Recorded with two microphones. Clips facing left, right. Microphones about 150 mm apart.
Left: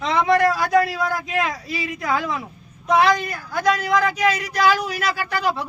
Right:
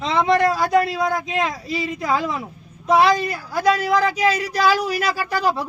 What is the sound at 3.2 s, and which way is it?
Speech, 5° right (ahead or behind).